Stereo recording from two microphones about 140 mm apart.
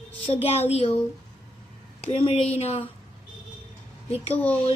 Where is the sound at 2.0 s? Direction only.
45° left (ahead or behind).